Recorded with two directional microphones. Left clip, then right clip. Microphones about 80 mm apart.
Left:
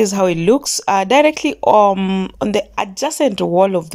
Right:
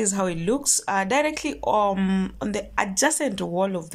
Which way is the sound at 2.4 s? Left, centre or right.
Left.